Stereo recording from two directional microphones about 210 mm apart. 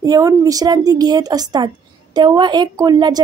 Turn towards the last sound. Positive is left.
turn(degrees=-20)  # may be behind; listen again after turning